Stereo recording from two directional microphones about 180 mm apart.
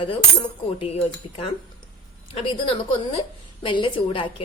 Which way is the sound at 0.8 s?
35° left (ahead or behind).